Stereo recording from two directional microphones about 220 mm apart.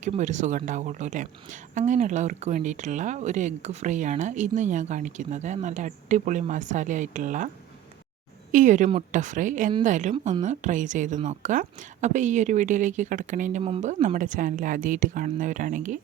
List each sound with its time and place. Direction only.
0.0 s speech: 35° right (ahead or behind)
8.5 s speech: 35° right (ahead or behind)